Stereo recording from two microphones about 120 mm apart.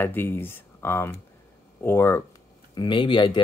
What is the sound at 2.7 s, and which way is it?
Speech, 40° left (ahead or behind).